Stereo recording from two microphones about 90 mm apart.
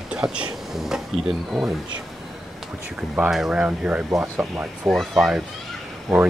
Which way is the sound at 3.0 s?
5° right (ahead or behind).